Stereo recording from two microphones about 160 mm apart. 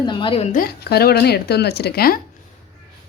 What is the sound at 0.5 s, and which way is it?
Speech, 75° left (ahead or behind).